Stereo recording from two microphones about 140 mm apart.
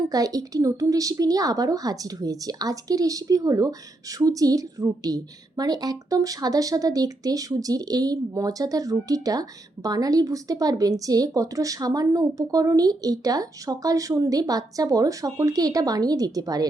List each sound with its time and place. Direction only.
0.1 s a woman's voice: 25° right (ahead or behind)